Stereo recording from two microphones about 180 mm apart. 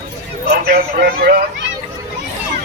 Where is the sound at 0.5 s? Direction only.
60° right (ahead or behind).